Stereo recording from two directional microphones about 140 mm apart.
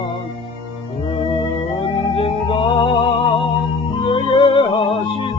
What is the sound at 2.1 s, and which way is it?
Music, 40° left (ahead or behind).